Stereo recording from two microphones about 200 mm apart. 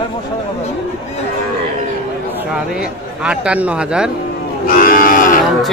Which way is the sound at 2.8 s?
5° right (ahead or behind).